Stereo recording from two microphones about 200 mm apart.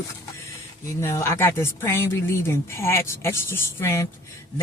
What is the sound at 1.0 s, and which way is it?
Speech, 15° left (ahead or behind).